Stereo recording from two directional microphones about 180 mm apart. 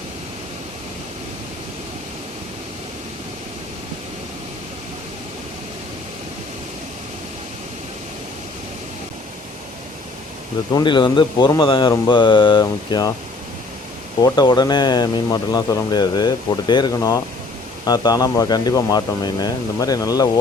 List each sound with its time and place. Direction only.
10.8 s speech: 25° left (ahead or behind)
14.2 s speech: 20° left (ahead or behind)